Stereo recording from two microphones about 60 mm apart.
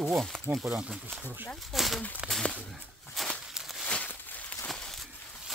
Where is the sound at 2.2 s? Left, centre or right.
Centre.